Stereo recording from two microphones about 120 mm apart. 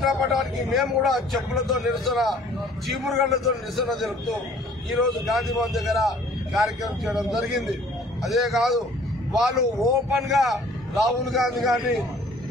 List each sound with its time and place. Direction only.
0.0 s a man's voice: centre (ahead or behind)